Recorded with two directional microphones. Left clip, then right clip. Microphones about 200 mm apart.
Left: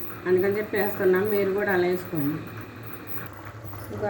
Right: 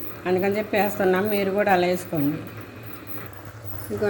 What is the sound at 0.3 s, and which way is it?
A woman's voice, 35° right (ahead or behind).